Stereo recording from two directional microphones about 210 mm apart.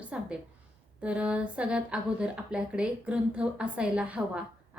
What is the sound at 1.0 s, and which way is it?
Speech, 5° right (ahead or behind).